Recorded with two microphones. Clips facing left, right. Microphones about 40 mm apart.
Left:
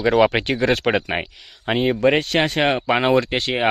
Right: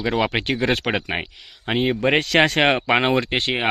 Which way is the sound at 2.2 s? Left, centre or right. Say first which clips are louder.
Right 2 dB; right.